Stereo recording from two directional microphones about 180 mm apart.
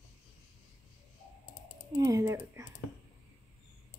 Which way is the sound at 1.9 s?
20° right (ahead or behind).